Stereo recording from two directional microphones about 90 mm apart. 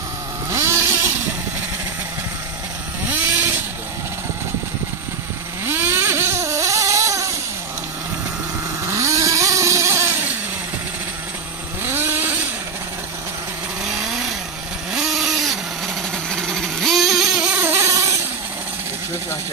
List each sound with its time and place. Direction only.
0.5 s vehicle: 35° right (ahead or behind)
5.7 s vehicle: 25° right (ahead or behind)
8.8 s vehicle: 35° right (ahead or behind)
11.8 s vehicle: 25° right (ahead or behind)
13.8 s vehicle: 5° right (ahead or behind)
17.6 s a sound: 25° right (ahead or behind)
17.9 s vehicle: 35° right (ahead or behind)